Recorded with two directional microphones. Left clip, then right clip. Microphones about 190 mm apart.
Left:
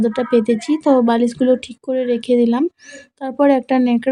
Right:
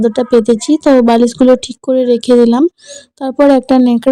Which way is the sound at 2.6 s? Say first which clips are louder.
Right 8 dB; 25° right (ahead or behind).